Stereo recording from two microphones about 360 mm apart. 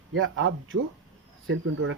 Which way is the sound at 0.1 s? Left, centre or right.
Right.